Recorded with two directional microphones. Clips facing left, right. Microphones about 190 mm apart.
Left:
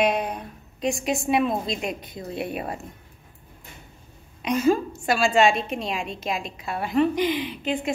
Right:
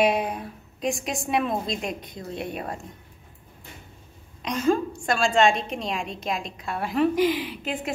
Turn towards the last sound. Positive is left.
turn(degrees=0)  # may be behind; listen again after turning